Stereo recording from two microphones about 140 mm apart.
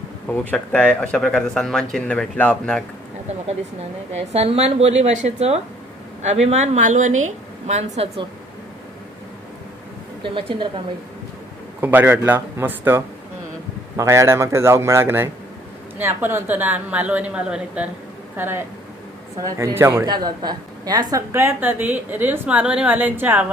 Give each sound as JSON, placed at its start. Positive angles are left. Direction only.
{"t": 0.3, "sound": "speech", "side_deg": 10}
{"t": 4.1, "sound": "a woman's voice", "side_deg": -50}
{"t": 10.2, "sound": "a woman's voice", "side_deg": -35}
{"t": 11.8, "sound": "a woman's voice", "side_deg": -15}
{"t": 20.2, "sound": "a woman's voice", "side_deg": -30}